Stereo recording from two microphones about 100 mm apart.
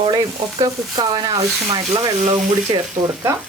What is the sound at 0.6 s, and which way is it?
Speech, 40° right (ahead or behind).